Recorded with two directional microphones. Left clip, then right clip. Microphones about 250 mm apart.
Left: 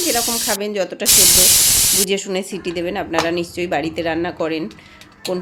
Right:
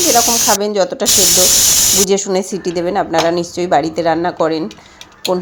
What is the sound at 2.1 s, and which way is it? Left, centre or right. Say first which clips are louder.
Speech: right 6 dB; centre.